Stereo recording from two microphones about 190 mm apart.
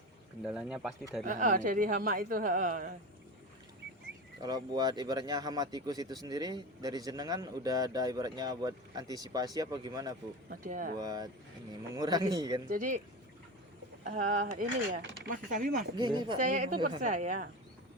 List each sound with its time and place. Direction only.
0.4 s speech: 5° right (ahead or behind)
1.2 s speech: 45° right (ahead or behind)
4.4 s speech: 20° right (ahead or behind)
10.5 s speech: 45° right (ahead or behind)
10.9 s speech: 20° right (ahead or behind)
12.6 s speech: 45° right (ahead or behind)
14.0 s speech: 40° right (ahead or behind)
16.0 s speech: 25° right (ahead or behind)
16.4 s a woman's voice: 40° right (ahead or behind)